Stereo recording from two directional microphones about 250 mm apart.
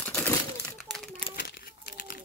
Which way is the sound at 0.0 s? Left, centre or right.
Centre.